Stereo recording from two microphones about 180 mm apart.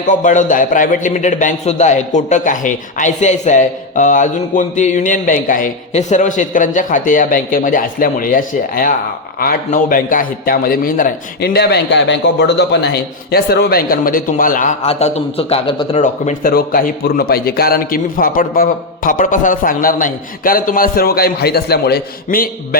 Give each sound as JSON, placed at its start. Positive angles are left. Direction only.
{"t": 0.1, "sound": "a man's voice", "side_deg": 45}
{"t": 16.5, "sound": "a man's voice", "side_deg": 55}